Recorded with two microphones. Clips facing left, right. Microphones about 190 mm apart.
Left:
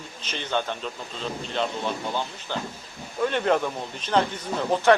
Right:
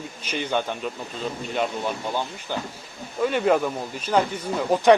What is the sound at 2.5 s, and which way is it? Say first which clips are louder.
Speech: right 1 dB; 10° right (ahead or behind).